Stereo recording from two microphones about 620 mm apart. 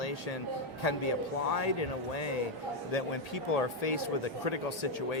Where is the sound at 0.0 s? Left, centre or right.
Left.